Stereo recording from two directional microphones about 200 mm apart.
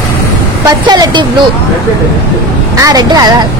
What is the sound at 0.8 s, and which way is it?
Speech, 20° right (ahead or behind).